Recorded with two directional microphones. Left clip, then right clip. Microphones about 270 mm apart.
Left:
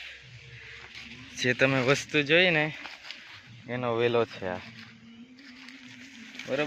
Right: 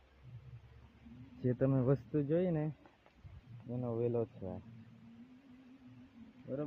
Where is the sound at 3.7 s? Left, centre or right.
Left.